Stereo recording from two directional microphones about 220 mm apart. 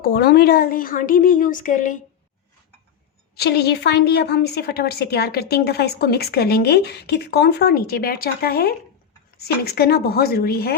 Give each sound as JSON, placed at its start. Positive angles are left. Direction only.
{"t": 0.0, "sound": "a woman's voice", "side_deg": 45}
{"t": 3.3, "sound": "a woman's voice", "side_deg": 45}